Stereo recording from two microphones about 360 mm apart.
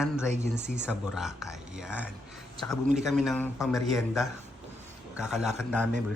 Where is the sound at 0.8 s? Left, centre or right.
Centre.